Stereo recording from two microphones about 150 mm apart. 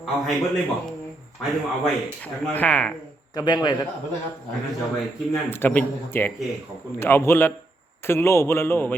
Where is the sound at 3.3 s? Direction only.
25° left (ahead or behind).